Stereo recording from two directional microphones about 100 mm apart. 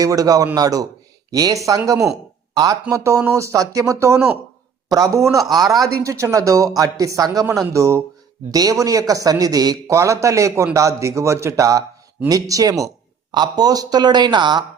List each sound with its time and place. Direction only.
0.0 s speech: 35° right (ahead or behind)